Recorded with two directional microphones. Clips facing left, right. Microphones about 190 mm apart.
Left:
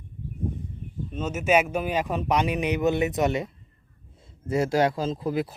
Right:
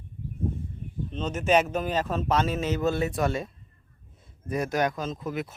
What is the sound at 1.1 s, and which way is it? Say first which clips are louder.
Speech: left 1 dB; 10° left (ahead or behind).